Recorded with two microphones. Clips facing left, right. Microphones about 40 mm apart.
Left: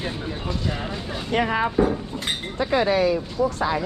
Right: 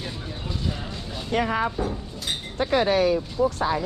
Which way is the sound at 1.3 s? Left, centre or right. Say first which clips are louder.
Left 2 dB; left.